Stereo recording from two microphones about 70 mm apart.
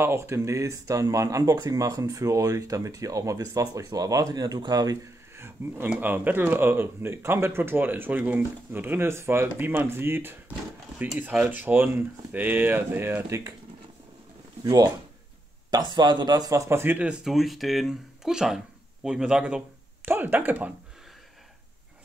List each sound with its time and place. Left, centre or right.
0.0 s speech: right
5.3 s speech: right
11.1 s speech: right
14.6 s speech: right
15.7 s speech: right
16.8 s speech: right
17.2 s a man's voice: centre
20.1 s speech: right